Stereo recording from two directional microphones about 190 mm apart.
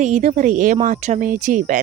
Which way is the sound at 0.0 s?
40° right (ahead or behind).